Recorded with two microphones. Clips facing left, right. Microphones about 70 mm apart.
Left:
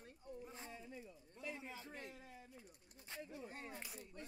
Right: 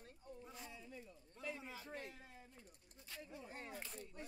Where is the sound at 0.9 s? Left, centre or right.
Centre.